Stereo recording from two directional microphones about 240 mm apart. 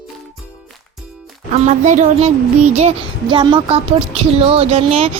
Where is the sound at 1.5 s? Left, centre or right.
Right.